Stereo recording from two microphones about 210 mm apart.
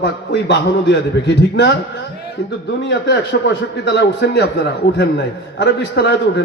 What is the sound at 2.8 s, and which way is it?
A man's voice, 55° left (ahead or behind).